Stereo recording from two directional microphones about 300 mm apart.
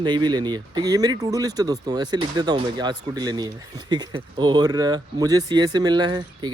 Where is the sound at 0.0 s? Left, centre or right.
Centre.